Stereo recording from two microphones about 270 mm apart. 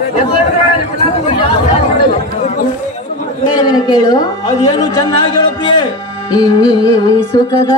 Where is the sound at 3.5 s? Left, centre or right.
Centre.